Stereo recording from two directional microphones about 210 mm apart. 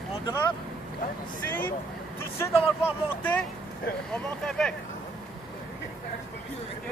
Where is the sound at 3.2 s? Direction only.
10° left (ahead or behind).